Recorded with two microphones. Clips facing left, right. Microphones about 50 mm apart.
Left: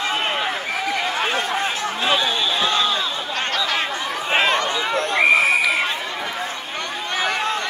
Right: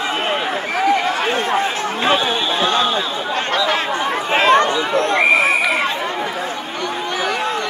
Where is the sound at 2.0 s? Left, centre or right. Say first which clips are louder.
Right 3 dB; right.